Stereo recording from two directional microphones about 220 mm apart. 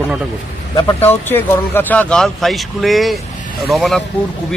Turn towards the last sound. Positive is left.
turn(degrees=0)  # may be behind; listen again after turning